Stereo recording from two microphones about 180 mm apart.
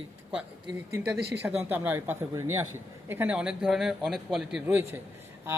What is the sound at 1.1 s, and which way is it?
Speech, 65° right (ahead or behind).